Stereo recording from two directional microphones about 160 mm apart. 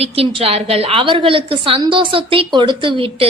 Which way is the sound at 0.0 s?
40° right (ahead or behind).